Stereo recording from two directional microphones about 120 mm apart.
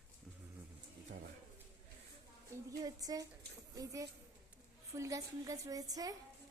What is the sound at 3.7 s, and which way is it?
A woman's voice, 30° right (ahead or behind).